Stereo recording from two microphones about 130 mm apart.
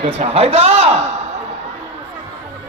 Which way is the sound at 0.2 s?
50° right (ahead or behind).